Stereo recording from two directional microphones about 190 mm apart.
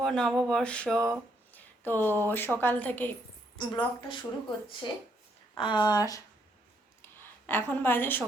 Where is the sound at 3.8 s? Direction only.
25° left (ahead or behind).